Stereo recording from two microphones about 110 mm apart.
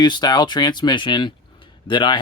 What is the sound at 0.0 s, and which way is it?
Speech, 40° left (ahead or behind).